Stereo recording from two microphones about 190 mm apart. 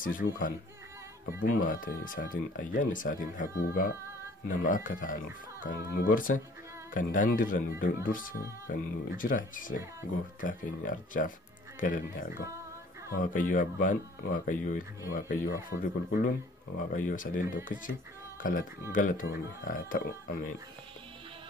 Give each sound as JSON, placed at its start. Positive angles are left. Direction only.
{"t": 0.0, "sound": "speech", "side_deg": 45}
{"t": 1.4, "sound": "speech", "side_deg": 45}